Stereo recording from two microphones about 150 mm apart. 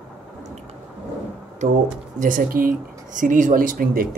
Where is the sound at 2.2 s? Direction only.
65° right (ahead or behind).